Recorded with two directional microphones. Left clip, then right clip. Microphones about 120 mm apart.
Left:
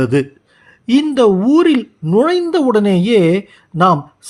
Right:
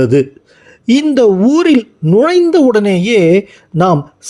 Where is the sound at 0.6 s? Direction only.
25° right (ahead or behind).